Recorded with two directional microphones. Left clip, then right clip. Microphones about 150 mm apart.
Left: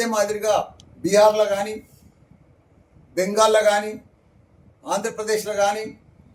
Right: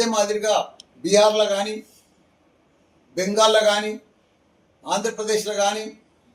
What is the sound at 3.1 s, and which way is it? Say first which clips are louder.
Speech: even; 15° left (ahead or behind).